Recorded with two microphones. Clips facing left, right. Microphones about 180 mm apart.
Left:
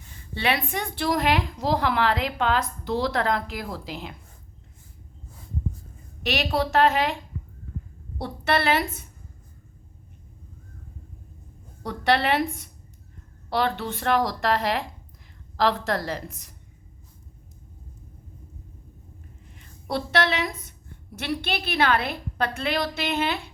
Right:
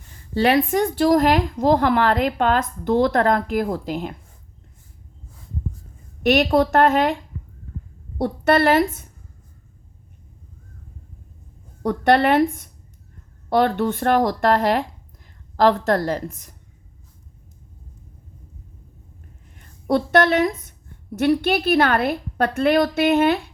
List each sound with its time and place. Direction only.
0.3 s a woman's voice: 40° right (ahead or behind)
6.2 s a woman's voice: 50° right (ahead or behind)
8.2 s a woman's voice: 45° right (ahead or behind)
11.8 s a woman's voice: 50° right (ahead or behind)
19.5 s a woman's voice: 50° right (ahead or behind)